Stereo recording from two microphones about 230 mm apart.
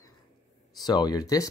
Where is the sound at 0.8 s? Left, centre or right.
Centre.